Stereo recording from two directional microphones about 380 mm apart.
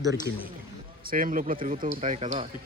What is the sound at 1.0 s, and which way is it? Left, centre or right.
Speech, right.